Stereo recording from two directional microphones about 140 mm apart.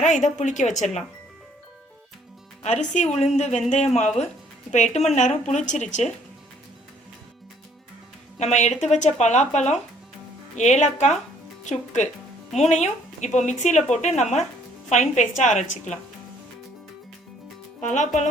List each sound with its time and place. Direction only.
0.0 s speech: 60° left (ahead or behind)
2.6 s a woman's voice: 55° left (ahead or behind)
8.4 s speech: 55° left (ahead or behind)
17.7 s speech: 60° left (ahead or behind)